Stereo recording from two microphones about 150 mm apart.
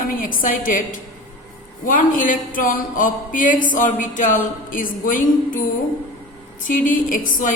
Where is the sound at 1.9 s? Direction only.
65° left (ahead or behind).